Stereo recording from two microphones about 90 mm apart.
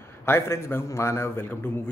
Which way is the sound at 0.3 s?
25° left (ahead or behind).